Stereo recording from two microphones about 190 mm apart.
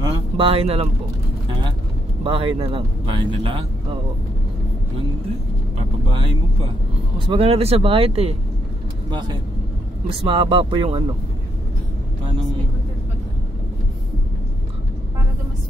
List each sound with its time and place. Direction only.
0.0 s a sound: 25° right (ahead or behind)
2.2 s speech: 30° right (ahead or behind)
5.8 s vehicle: 25° right (ahead or behind)
7.2 s speech: 30° right (ahead or behind)
10.0 s speech: 25° right (ahead or behind)